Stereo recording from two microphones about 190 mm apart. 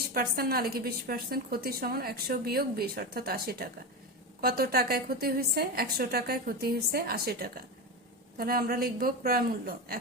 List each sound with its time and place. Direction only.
0.1 s a woman's voice: 50° right (ahead or behind)